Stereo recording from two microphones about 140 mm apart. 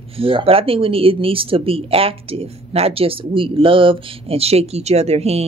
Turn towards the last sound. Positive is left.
turn(degrees=-50)  # may be behind; listen again after turning